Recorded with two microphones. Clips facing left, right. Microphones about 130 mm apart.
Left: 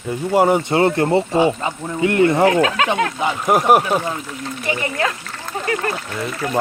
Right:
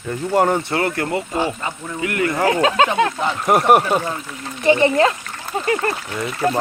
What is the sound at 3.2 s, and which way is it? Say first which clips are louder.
Speech: left 2 dB; 5° left (ahead or behind).